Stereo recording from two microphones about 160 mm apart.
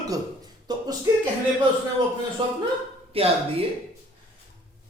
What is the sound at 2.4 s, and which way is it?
Speech, 30° right (ahead or behind).